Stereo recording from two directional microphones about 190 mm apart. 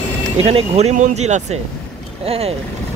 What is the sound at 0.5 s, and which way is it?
Speech, 35° right (ahead or behind).